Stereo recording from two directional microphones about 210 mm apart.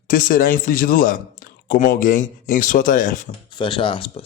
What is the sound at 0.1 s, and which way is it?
Speech, 40° left (ahead or behind).